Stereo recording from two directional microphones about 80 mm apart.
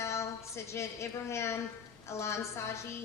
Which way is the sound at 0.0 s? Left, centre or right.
Left.